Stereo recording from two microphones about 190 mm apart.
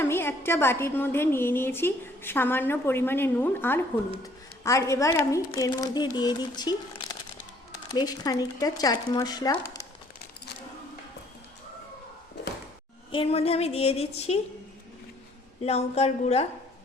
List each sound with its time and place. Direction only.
0.0 s a woman's voice: 10° left (ahead or behind)
13.1 s a woman's voice: 30° left (ahead or behind)
15.6 s a woman's voice: 35° left (ahead or behind)